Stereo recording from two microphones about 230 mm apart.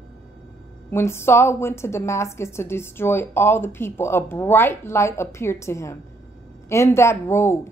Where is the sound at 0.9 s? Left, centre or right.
Centre.